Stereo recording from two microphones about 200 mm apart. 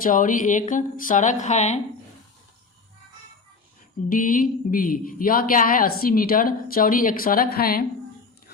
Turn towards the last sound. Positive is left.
turn(degrees=50)  # may be behind; listen again after turning